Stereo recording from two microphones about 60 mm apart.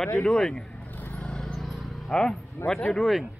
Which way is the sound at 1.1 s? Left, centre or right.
Centre.